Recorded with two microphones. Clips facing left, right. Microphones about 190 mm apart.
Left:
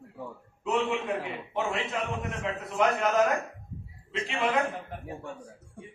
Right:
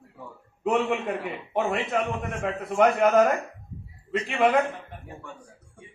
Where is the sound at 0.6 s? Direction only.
55° right (ahead or behind).